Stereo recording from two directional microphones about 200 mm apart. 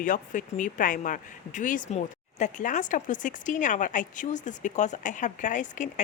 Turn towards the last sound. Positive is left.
turn(degrees=40)  # may be behind; listen again after turning